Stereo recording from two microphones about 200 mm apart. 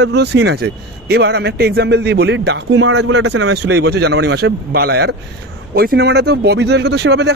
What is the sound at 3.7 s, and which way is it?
Speech, 55° right (ahead or behind).